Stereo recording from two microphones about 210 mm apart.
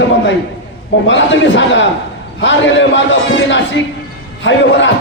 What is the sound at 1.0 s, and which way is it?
A man's voice, 60° left (ahead or behind).